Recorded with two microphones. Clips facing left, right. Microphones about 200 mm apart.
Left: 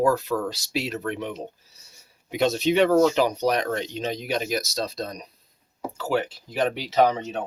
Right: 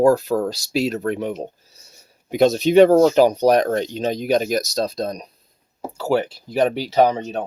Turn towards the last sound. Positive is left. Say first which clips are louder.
# right 4 dB
turn(degrees=-35)  # may be behind; listen again after turning